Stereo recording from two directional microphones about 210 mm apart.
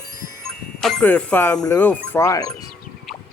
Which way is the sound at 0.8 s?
5° left (ahead or behind).